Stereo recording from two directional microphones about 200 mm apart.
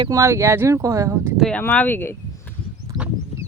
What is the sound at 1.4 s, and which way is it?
Speech, 5° left (ahead or behind).